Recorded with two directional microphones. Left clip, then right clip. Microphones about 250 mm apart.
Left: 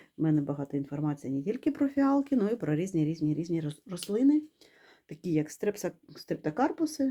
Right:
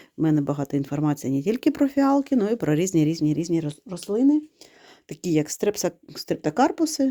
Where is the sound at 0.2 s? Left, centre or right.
Right.